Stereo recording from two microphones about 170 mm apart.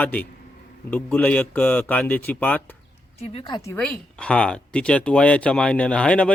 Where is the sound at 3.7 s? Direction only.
5° left (ahead or behind).